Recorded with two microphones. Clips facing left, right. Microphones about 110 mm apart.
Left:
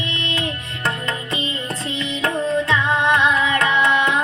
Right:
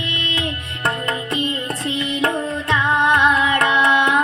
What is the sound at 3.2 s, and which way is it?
Carnatic music, 55° right (ahead or behind).